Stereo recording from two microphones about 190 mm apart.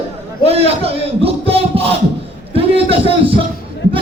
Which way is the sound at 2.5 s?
30° right (ahead or behind).